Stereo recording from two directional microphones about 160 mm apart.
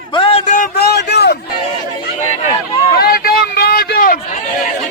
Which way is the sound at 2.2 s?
40° left (ahead or behind).